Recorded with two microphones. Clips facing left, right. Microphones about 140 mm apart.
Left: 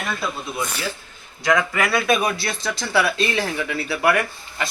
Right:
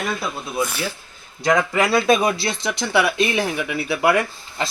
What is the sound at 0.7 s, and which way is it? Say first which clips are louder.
Speech: right 1 dB; 10° right (ahead or behind).